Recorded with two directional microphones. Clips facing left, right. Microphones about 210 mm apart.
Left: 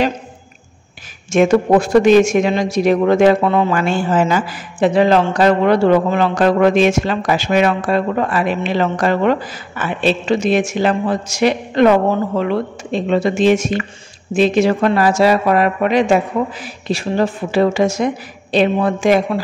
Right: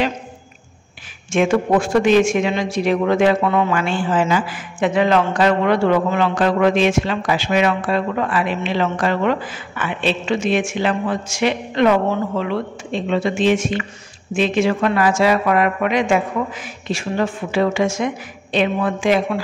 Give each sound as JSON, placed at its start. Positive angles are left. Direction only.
{"t": 1.3, "sound": "a man's voice", "side_deg": 40}